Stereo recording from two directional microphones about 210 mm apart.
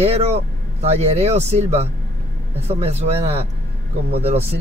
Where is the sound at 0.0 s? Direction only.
30° right (ahead or behind).